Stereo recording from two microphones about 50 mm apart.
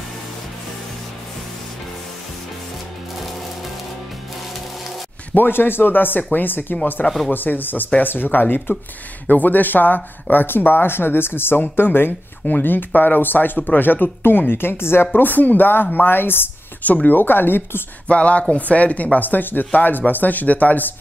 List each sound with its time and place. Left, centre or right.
5.3 s a woman's voice: left
15.1 s a woman's voice: left
18.0 s a sound: left
18.5 s speech: left